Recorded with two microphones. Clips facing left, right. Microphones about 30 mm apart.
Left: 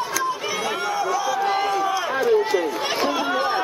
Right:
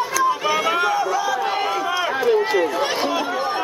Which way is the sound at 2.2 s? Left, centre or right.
Right.